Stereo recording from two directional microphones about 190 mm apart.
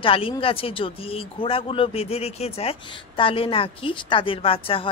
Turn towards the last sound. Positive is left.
turn(degrees=30)  # may be behind; listen again after turning